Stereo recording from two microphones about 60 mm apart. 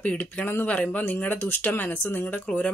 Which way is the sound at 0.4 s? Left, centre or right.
Left.